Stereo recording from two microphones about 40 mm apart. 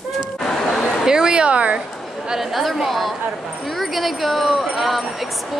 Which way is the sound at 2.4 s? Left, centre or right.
Centre.